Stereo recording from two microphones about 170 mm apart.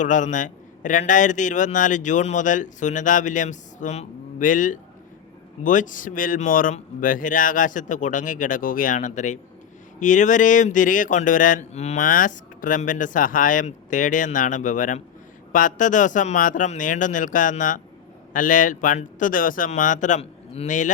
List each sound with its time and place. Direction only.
0.0 s mantra: 45° left (ahead or behind)